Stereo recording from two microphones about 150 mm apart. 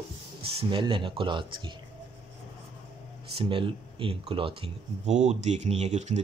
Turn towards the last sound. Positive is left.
turn(degrees=-50)  # may be behind; listen again after turning